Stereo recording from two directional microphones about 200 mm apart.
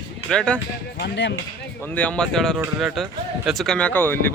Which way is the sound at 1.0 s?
55° left (ahead or behind).